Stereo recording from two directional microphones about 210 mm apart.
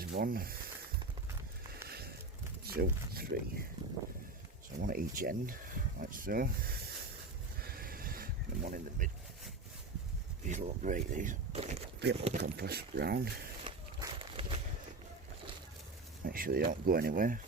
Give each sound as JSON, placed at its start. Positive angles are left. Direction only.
{"t": 0.0, "sound": "speech", "side_deg": -45}
{"t": 1.9, "sound": "a sound", "side_deg": -50}
{"t": 2.6, "sound": "speech", "side_deg": -45}
{"t": 4.8, "sound": "speech", "side_deg": -40}
{"t": 7.6, "sound": "a sound", "side_deg": -45}
{"t": 10.4, "sound": "speech", "side_deg": -35}
{"t": 12.4, "sound": "speech", "side_deg": -50}
{"t": 13.7, "sound": "a sound", "side_deg": -25}
{"t": 16.2, "sound": "speech", "side_deg": -40}